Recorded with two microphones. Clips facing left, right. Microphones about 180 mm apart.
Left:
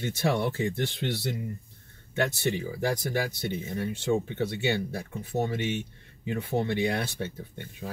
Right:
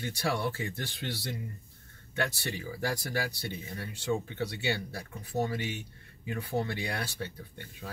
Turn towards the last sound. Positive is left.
turn(degrees=20)  # may be behind; listen again after turning